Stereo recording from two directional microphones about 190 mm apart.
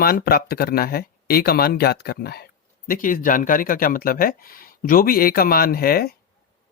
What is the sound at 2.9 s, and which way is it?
Speech, 45° left (ahead or behind).